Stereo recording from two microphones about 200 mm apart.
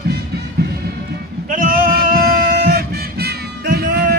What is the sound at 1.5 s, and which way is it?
Music, 45° right (ahead or behind).